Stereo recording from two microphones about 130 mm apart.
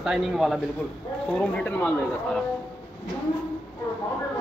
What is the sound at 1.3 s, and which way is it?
Speech, 10° left (ahead or behind).